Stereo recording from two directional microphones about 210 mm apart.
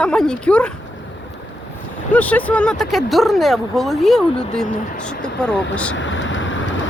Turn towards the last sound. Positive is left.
turn(degrees=65)  # may be behind; listen again after turning